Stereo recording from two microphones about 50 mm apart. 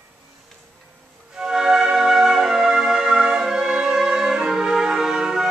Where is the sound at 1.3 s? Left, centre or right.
Centre.